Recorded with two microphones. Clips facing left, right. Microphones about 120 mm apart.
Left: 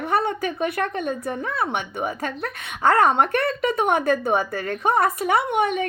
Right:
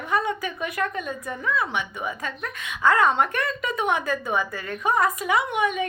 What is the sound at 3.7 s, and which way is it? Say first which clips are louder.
Speech: left 2 dB; 40° left (ahead or behind).